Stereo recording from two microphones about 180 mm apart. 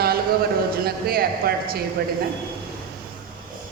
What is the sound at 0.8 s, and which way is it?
Speech, 60° right (ahead or behind).